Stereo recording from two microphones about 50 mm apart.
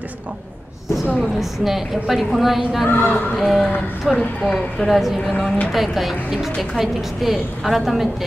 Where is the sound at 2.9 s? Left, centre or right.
Left.